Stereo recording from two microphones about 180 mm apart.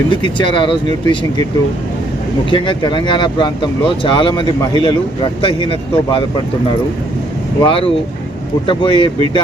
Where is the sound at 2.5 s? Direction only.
25° left (ahead or behind).